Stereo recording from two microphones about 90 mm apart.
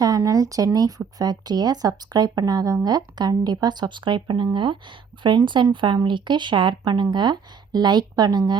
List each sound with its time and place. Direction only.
0.2 s speech: 40° right (ahead or behind)